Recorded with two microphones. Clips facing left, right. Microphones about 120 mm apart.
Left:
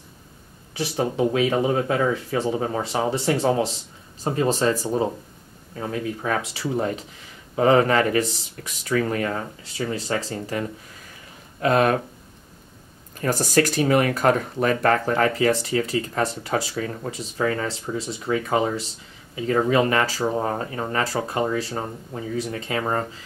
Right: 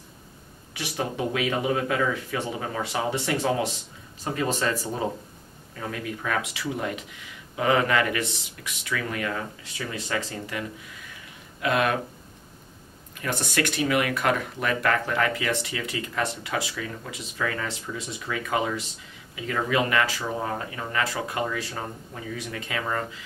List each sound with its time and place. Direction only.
0.7 s speech: 30° left (ahead or behind)
13.2 s speech: 40° left (ahead or behind)